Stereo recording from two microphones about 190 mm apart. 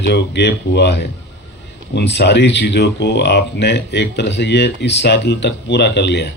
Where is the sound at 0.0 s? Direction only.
60° left (ahead or behind).